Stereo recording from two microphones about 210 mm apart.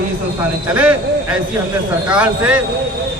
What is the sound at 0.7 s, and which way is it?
Speech, 5° right (ahead or behind).